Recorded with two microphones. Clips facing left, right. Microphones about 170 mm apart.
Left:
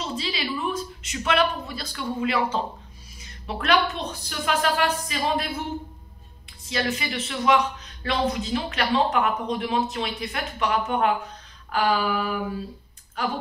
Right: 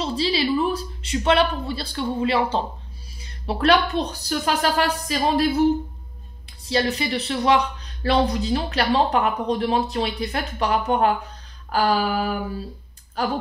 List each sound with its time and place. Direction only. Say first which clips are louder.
0.0 s speech: right 7 dB; 35° right (ahead or behind)
6.6 s speech: right 5 dB; 35° right (ahead or behind)